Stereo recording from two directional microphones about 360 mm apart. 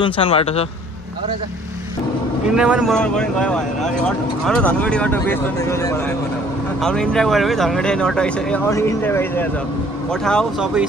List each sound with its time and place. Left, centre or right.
0.0 s a man's voice: centre
2.5 s speech: centre